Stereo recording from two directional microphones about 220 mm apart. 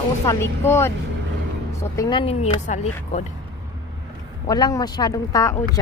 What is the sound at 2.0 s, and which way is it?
Speech, 20° left (ahead or behind).